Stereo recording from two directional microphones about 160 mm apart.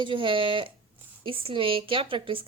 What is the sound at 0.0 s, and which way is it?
Speech, 30° right (ahead or behind).